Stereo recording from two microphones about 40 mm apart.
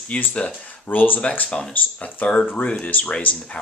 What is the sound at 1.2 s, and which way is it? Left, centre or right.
Speech, left.